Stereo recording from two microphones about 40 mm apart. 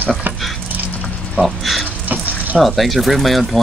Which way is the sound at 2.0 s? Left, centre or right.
Right.